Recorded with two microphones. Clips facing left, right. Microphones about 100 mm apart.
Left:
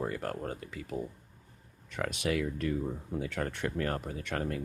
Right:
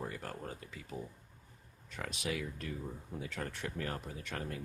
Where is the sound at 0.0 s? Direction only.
60° left (ahead or behind).